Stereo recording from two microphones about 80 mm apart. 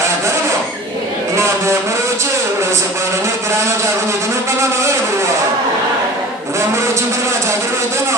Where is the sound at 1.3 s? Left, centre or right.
Right.